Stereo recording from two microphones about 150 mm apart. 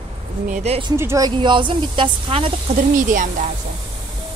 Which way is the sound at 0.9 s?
20° right (ahead or behind).